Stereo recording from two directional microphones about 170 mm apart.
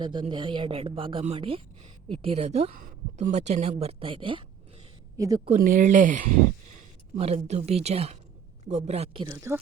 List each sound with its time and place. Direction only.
0.0 s a woman's voice: 30° right (ahead or behind)
2.7 s a woman's voice: 50° right (ahead or behind); by 4.4 s 30° right (ahead or behind)
5.1 s a woman's voice: 20° right (ahead or behind)
5.5 s speech: 50° right (ahead or behind)
7.2 s a woman's voice: 40° right (ahead or behind)
9.3 s speech: 15° right (ahead or behind)